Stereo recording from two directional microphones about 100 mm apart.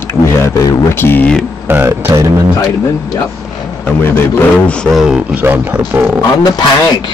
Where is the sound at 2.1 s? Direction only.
35° right (ahead or behind).